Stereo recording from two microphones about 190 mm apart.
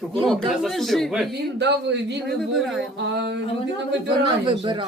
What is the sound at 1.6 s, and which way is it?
Speech, 65° right (ahead or behind).